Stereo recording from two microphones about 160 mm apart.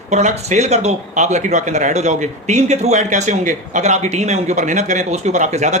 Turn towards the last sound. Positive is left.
turn(degrees=-50)  # may be behind; listen again after turning